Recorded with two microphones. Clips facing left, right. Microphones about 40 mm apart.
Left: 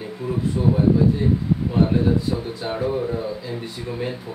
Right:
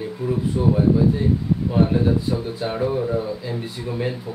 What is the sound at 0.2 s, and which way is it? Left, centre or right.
Speech, centre.